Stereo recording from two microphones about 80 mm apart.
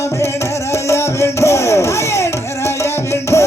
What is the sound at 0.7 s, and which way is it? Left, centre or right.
Music, left.